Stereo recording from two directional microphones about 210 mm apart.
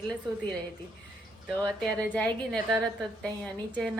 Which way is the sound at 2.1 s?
5° left (ahead or behind).